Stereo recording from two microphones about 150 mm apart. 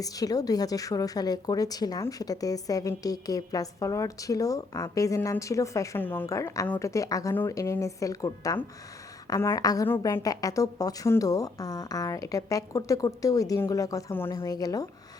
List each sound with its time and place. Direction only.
0.0 s a woman's voice: 25° left (ahead or behind)